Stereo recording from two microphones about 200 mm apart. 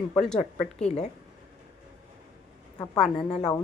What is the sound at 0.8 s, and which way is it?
Speech, 35° left (ahead or behind).